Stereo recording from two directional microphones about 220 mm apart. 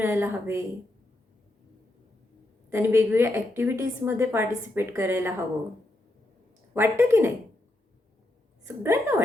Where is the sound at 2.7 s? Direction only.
10° right (ahead or behind).